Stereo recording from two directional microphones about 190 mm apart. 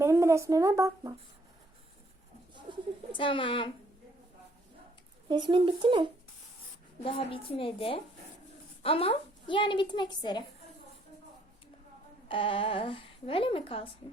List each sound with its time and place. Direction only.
0.0 s speech: 15° right (ahead or behind)
3.2 s a woman's voice: 25° left (ahead or behind)
5.3 s speech: 25° right (ahead or behind)
7.0 s a woman's voice: 30° left (ahead or behind)
12.3 s a woman's voice: 25° left (ahead or behind)